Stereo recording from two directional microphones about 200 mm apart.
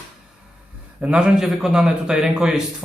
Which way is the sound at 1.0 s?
5° right (ahead or behind).